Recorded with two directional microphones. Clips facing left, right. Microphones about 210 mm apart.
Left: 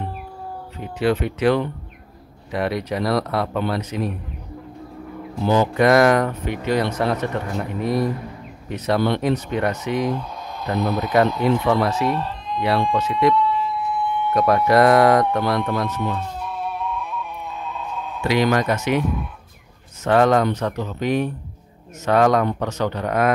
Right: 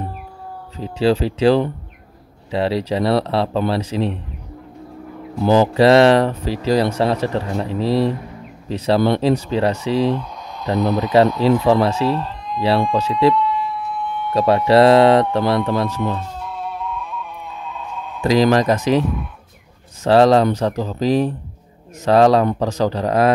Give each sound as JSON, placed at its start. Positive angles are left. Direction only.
{"t": 0.7, "sound": "speech", "side_deg": -30}
{"t": 5.5, "sound": "speech", "side_deg": -30}
{"t": 14.3, "sound": "speech", "side_deg": -30}
{"t": 18.2, "sound": "speech", "side_deg": -35}